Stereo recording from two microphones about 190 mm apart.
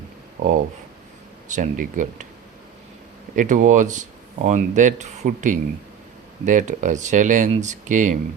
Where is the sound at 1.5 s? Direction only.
40° right (ahead or behind).